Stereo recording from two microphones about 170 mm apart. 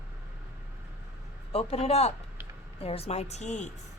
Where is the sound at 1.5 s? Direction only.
35° left (ahead or behind).